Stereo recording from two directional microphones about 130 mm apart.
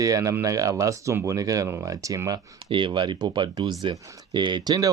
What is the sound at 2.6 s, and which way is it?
Speech, 40° right (ahead or behind).